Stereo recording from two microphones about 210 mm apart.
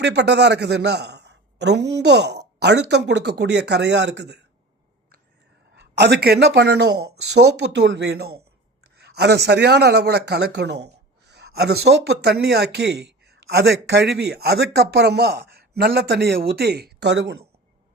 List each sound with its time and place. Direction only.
0.0 s speech: 55° right (ahead or behind)
5.7 s a woman's voice: 55° right (ahead or behind)